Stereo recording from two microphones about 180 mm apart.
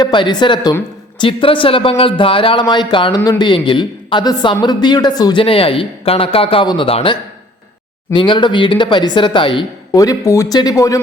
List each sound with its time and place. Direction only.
0.0 s a man's voice: 25° left (ahead or behind)